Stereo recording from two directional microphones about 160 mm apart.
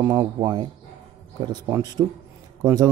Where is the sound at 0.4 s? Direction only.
30° right (ahead or behind).